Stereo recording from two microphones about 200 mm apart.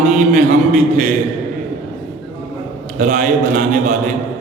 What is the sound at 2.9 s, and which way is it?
Mantra, 40° right (ahead or behind).